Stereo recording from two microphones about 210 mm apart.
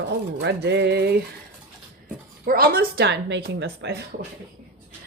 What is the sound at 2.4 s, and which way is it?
A woman's voice, 45° right (ahead or behind).